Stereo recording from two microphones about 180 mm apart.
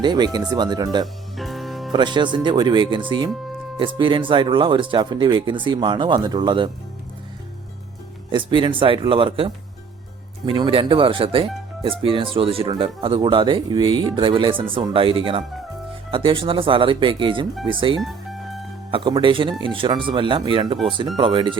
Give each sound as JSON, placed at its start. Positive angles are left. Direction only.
{"t": 0.0, "sound": "speech", "side_deg": -25}
{"t": 1.4, "sound": "music", "side_deg": 0}
{"t": 1.9, "sound": "speech", "side_deg": -25}
{"t": 8.3, "sound": "speech", "side_deg": -25}
{"t": 18.0, "sound": "music", "side_deg": 0}
{"t": 18.9, "sound": "speech", "side_deg": -30}